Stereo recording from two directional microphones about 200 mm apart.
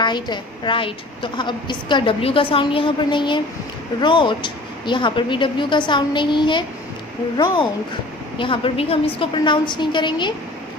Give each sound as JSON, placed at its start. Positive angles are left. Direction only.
{"t": 0.0, "sound": "a woman's voice", "side_deg": 20}